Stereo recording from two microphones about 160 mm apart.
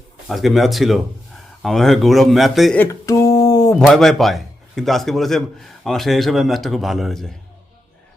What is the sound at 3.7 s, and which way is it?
A man's voice, centre (ahead or behind).